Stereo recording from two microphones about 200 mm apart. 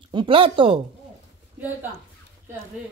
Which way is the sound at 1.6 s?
10° right (ahead or behind).